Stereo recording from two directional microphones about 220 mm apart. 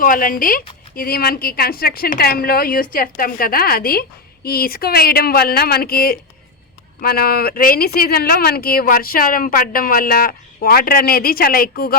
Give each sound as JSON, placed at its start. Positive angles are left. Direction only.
{"t": 0.0, "sound": "a woman's voice", "side_deg": 40}